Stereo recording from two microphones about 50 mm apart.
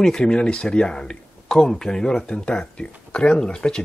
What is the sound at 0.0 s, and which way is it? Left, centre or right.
Speech, centre.